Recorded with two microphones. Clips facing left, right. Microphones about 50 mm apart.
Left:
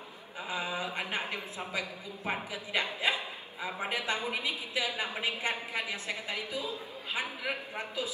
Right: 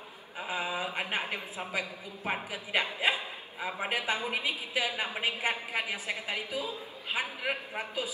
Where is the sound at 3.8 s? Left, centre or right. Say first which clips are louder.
Right 1 dB; centre.